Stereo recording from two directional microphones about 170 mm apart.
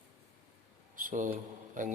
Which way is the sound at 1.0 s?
50° right (ahead or behind).